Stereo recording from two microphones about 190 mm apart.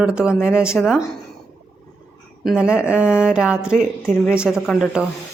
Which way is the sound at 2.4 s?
5° right (ahead or behind).